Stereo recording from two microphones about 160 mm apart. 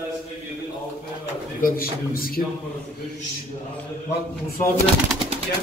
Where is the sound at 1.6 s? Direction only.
65° left (ahead or behind).